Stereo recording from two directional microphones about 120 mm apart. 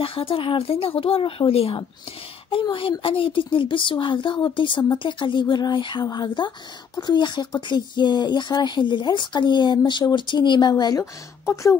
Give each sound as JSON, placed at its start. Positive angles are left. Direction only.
{"t": 0.0, "sound": "a woman's voice", "side_deg": 50}